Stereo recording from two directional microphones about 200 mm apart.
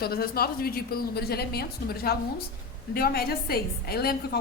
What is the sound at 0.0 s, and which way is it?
A woman's voice, 50° left (ahead or behind).